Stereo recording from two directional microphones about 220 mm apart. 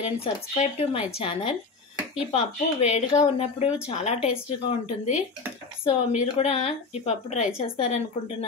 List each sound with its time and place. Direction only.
0.0 s a woman's voice: 25° left (ahead or behind)